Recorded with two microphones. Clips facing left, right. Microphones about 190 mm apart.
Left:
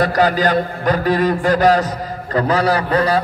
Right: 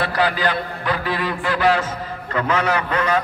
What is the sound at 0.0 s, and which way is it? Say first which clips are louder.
A man's voice: left 5 dB; 45° left (ahead or behind).